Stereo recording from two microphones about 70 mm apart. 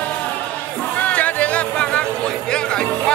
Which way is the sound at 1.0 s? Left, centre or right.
Left.